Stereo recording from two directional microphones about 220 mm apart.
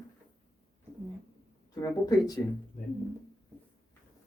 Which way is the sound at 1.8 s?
15° left (ahead or behind).